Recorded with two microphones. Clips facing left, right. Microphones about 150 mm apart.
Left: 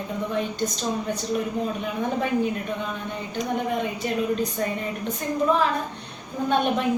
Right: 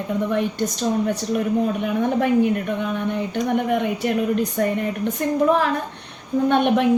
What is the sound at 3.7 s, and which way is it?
Speech, 70° right (ahead or behind).